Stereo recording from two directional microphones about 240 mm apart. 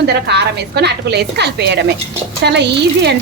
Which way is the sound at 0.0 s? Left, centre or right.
Right.